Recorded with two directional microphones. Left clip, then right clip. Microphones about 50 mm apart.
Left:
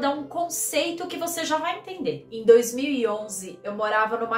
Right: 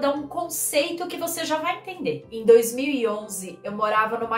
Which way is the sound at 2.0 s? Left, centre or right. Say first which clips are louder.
Even; right.